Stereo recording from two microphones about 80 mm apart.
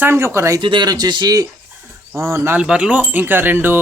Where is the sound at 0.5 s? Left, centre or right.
Right.